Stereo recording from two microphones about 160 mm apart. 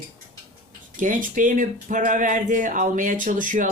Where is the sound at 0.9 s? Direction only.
55° right (ahead or behind).